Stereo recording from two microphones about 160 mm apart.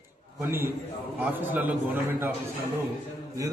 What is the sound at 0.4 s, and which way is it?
A man's voice, 15° right (ahead or behind).